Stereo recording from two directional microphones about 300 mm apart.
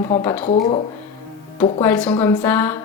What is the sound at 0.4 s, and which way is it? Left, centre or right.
Speech, left.